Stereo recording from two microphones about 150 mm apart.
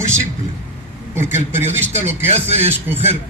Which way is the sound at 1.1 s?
15° right (ahead or behind).